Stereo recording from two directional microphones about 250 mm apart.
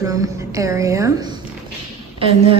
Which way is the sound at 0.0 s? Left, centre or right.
Centre.